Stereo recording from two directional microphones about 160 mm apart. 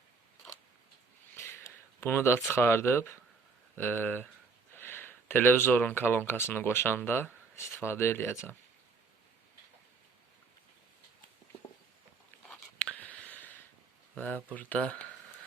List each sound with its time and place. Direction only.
1.4 s speech: 15° left (ahead or behind)
12.5 s whispering: 5° left (ahead or behind)
14.2 s speech: 10° left (ahead or behind)